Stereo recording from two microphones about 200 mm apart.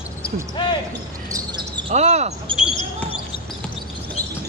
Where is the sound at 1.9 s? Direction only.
35° right (ahead or behind).